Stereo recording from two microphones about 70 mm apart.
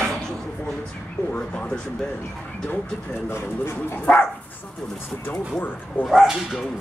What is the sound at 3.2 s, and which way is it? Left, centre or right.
Speech, left.